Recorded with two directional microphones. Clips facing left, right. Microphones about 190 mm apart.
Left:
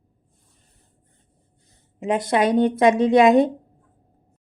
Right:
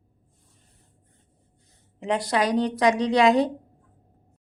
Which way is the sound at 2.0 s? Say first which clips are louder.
Left 4 dB; 20° left (ahead or behind).